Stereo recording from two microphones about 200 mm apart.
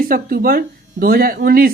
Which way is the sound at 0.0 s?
45° right (ahead or behind).